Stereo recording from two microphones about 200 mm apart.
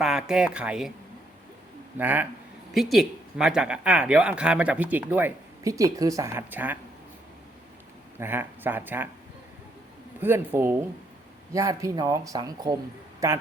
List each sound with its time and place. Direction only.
0.0 s speech: 5° right (ahead or behind)
2.0 s speech: 10° right (ahead or behind)
8.2 s speech: 10° right (ahead or behind)
10.2 s speech: 10° right (ahead or behind)